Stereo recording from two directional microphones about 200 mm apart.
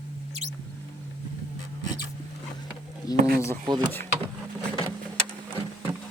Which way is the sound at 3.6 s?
20° right (ahead or behind).